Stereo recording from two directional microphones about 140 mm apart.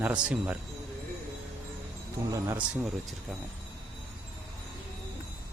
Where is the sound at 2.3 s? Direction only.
25° right (ahead or behind).